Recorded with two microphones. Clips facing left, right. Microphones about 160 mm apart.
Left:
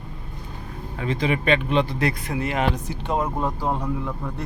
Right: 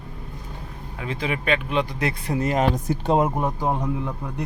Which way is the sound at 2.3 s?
40° right (ahead or behind).